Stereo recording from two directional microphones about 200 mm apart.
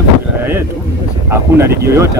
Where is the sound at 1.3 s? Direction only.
15° right (ahead or behind).